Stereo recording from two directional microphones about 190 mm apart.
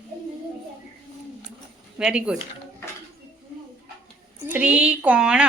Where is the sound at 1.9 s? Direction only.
5° right (ahead or behind).